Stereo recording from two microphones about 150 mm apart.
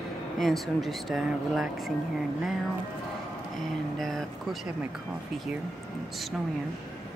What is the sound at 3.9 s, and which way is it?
Speech, centre (ahead or behind).